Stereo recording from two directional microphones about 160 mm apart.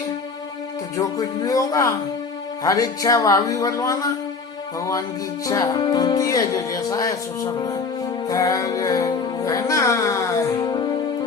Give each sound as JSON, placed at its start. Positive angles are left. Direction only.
{"t": 0.9, "sound": "speech", "side_deg": 20}
{"t": 5.5, "sound": "speech", "side_deg": 25}
{"t": 8.3, "sound": "music", "side_deg": 20}